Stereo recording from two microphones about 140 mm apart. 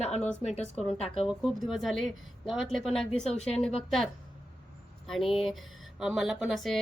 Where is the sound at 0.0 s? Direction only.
55° left (ahead or behind).